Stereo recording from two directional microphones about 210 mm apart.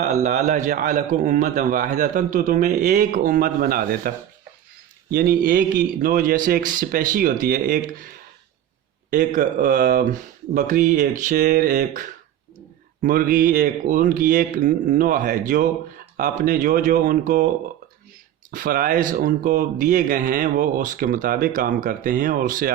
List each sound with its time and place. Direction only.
0.2 s a man's voice: 35° right (ahead or behind)
5.1 s a man's voice: 45° right (ahead or behind)
9.0 s a man's voice: 40° right (ahead or behind)
18.5 s a man's voice: 45° right (ahead or behind)